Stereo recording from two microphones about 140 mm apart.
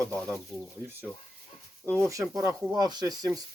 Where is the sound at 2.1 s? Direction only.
25° right (ahead or behind).